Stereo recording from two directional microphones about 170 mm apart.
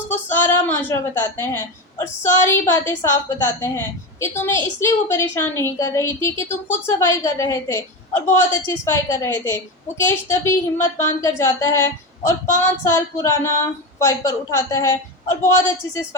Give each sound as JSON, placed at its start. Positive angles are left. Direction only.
{"t": 0.1, "sound": "a woman's voice", "side_deg": 15}